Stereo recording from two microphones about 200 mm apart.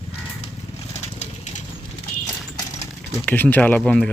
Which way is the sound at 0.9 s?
35° left (ahead or behind).